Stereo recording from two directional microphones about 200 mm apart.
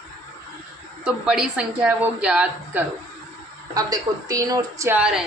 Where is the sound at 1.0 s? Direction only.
5° right (ahead or behind).